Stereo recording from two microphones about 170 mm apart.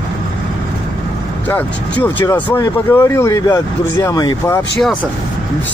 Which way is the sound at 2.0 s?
10° left (ahead or behind).